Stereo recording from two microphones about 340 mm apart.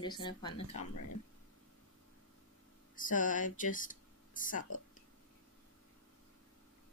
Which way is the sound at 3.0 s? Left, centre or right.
Left.